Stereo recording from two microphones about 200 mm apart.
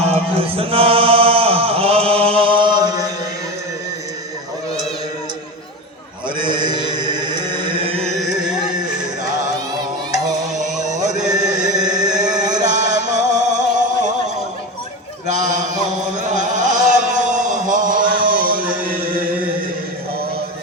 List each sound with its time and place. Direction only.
0.0 s chant: 30° right (ahead or behind)
6.6 s music: 20° right (ahead or behind)
10.6 s a sound: 35° right (ahead or behind)
11.5 s chant: 40° right (ahead or behind)
15.3 s chant: 40° right (ahead or behind)